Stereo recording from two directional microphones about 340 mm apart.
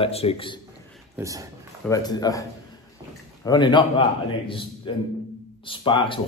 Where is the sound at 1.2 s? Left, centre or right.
Centre.